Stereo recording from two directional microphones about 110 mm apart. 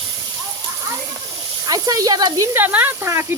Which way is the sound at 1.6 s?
35° right (ahead or behind).